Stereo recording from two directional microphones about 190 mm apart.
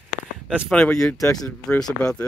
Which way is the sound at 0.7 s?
5° left (ahead or behind).